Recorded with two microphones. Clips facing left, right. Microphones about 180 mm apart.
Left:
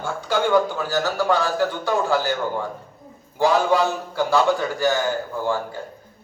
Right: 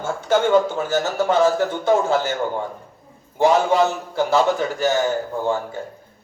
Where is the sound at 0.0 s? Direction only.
20° right (ahead or behind).